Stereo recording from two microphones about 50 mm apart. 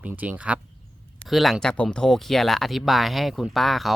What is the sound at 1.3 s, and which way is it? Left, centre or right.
Speech, centre.